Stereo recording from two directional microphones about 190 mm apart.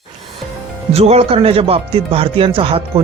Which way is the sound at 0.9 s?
35° right (ahead or behind).